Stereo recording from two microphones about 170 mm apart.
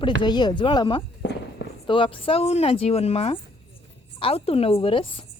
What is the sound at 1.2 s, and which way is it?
Fireworks, 90° left.